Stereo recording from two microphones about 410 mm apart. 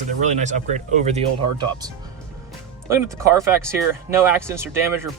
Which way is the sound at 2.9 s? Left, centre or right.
Centre.